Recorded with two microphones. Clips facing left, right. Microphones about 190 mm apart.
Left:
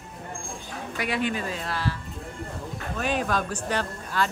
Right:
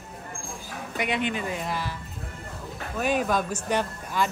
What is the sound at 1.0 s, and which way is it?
Speech, 20° right (ahead or behind).